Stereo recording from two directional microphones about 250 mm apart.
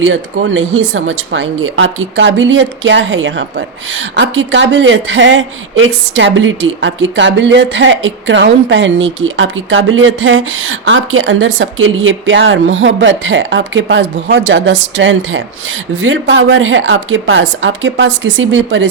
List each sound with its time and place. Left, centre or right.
0.0 s speech: right